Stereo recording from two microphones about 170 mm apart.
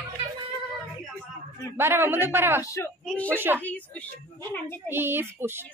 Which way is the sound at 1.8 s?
15° right (ahead or behind).